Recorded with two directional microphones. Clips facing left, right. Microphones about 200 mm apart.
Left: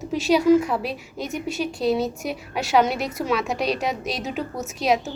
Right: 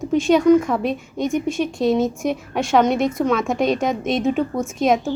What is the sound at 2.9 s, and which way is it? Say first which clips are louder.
A woman's voice: right 6 dB; 45° right (ahead or behind).